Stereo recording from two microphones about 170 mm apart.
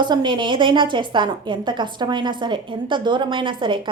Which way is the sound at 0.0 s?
25° right (ahead or behind).